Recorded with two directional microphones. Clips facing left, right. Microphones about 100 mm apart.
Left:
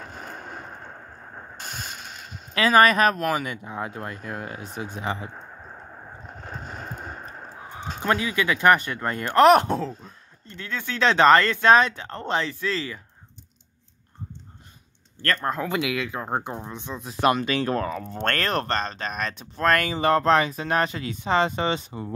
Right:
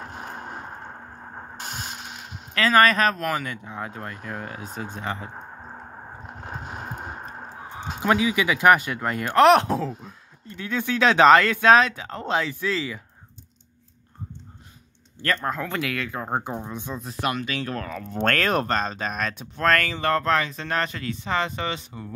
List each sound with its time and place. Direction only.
0.2 s a sound: 10° right (ahead or behind)
2.5 s speech: 10° left (ahead or behind)
5.5 s a sound: 25° right (ahead or behind)
7.9 s speech: 10° right (ahead or behind)
15.3 s speech: 5° left (ahead or behind)
17.2 s speech: 30° left (ahead or behind)
18.1 s speech: centre (ahead or behind)
21.5 s speech: 25° left (ahead or behind)